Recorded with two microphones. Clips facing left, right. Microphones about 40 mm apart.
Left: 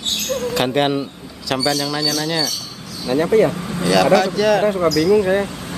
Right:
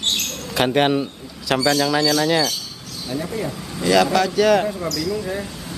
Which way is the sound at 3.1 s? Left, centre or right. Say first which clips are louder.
Left 11 dB; left.